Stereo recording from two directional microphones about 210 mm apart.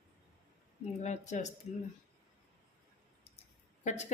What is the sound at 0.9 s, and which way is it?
Speech, 35° left (ahead or behind).